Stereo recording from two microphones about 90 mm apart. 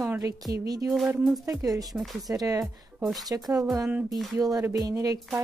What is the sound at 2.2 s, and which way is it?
Speech, 40° right (ahead or behind).